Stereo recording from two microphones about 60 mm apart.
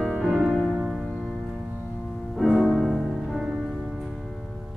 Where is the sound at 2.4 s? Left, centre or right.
Centre.